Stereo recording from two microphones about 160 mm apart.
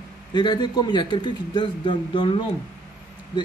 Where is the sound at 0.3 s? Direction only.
30° left (ahead or behind).